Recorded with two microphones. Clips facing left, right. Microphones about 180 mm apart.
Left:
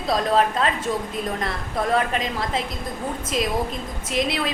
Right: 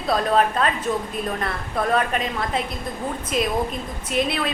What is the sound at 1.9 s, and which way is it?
Speech, 25° left (ahead or behind).